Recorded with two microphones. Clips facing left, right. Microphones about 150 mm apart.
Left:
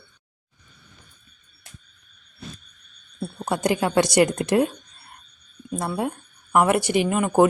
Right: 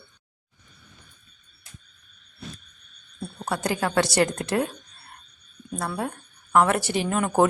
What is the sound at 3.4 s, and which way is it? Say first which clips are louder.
Speech: left 4 dB; 15° left (ahead or behind).